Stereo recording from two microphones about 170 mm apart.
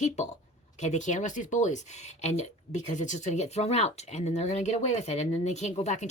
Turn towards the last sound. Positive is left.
turn(degrees=40)  # may be behind; listen again after turning